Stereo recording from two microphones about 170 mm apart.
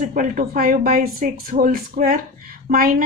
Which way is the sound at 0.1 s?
50° right (ahead or behind).